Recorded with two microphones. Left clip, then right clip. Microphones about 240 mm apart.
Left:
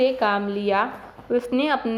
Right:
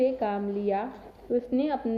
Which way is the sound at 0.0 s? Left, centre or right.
Centre.